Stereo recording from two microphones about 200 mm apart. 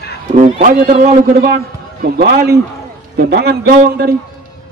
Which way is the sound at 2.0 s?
55° right (ahead or behind).